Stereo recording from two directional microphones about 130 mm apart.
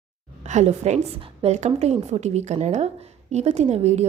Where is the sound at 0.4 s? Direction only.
65° right (ahead or behind).